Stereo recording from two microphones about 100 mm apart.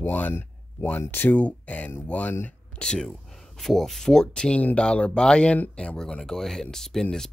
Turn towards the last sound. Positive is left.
turn(degrees=5)  # may be behind; listen again after turning